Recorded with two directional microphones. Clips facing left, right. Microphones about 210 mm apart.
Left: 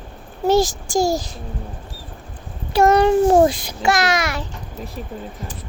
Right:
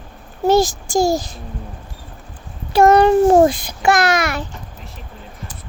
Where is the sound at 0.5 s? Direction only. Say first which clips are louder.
Right 2 dB; 50° right (ahead or behind).